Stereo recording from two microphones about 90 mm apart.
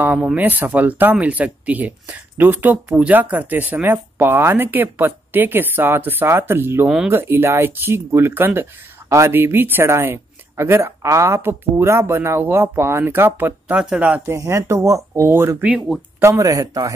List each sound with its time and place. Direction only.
0.2 s speech: 15° right (ahead or behind)
13.7 s speech: 10° right (ahead or behind)
14.2 s speech: 30° right (ahead or behind)
16.2 s speech: 35° right (ahead or behind)